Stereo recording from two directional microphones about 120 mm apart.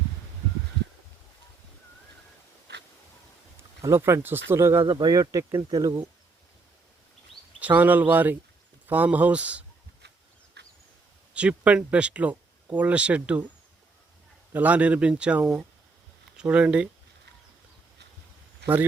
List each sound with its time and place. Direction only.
3.6 s speech: 20° right (ahead or behind)
4.8 s speech: 40° right (ahead or behind)
7.6 s speech: 15° right (ahead or behind)
11.3 s speech: 10° right (ahead or behind)
14.5 s speech: 15° right (ahead or behind)
18.6 s a man's voice: 15° right (ahead or behind)